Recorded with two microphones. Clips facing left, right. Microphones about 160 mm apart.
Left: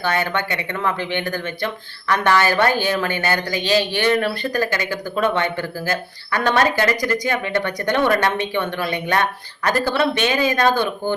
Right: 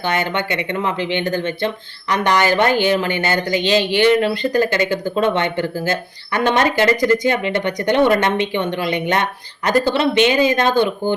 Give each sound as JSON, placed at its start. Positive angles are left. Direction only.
{"t": 0.0, "sound": "speech", "side_deg": -20}